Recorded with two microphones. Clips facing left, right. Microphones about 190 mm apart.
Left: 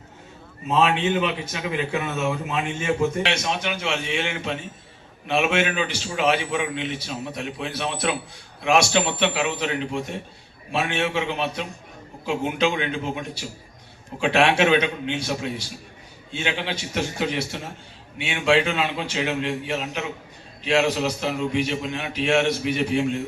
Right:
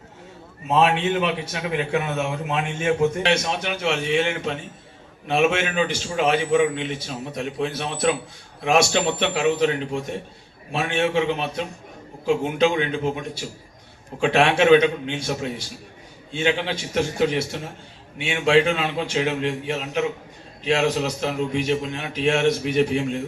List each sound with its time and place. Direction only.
0.8 s a man's voice: 60° right (ahead or behind)
4.1 s a man's voice: 45° right (ahead or behind)
20.7 s a man's voice: 45° right (ahead or behind)